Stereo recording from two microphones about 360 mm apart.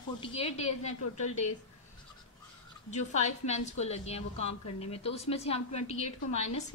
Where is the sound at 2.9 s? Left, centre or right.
Centre.